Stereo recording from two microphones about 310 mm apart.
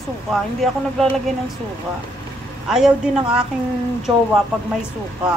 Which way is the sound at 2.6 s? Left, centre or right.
Centre.